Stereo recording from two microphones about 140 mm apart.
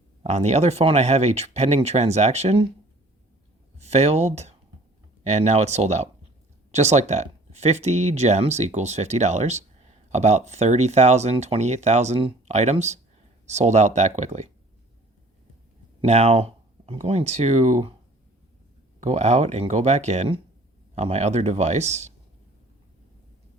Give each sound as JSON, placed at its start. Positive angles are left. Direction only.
{"t": 0.2, "sound": "speech", "side_deg": -50}
{"t": 3.8, "sound": "speech", "side_deg": -50}
{"t": 16.0, "sound": "speech", "side_deg": -50}
{"t": 18.9, "sound": "speech", "side_deg": -55}